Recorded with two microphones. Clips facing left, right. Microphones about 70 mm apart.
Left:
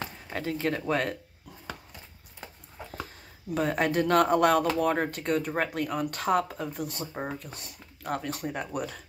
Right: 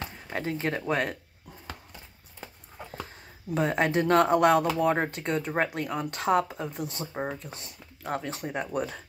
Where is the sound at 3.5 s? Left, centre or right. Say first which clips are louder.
Right 1 dB; right.